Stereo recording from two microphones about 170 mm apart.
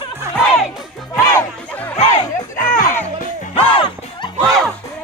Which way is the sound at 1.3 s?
10° left (ahead or behind).